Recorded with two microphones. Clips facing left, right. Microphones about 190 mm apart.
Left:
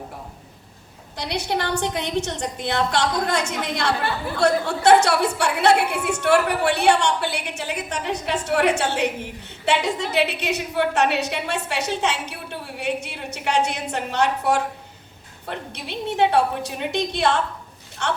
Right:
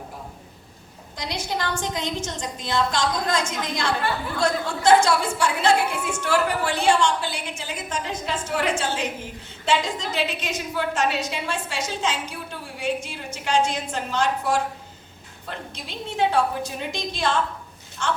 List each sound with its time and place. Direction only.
1.1 s a woman's voice: 65° left (ahead or behind)